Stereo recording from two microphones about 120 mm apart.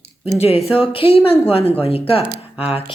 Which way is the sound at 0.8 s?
50° left (ahead or behind).